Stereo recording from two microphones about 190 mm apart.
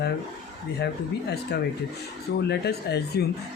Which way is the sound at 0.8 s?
60° left (ahead or behind).